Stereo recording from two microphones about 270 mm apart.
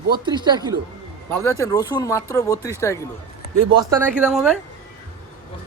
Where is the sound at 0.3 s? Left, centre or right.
Centre.